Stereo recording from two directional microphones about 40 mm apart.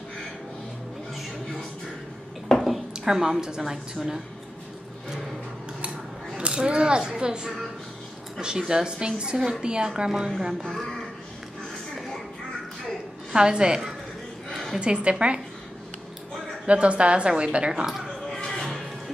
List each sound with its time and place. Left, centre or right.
2.9 s a woman's voice: centre
6.4 s a woman's voice: right
10.6 s speech: centre
13.3 s a woman's voice: right
14.5 s a sound: centre
14.8 s a woman's voice: right
16.6 s a woman's voice: right
18.3 s music: centre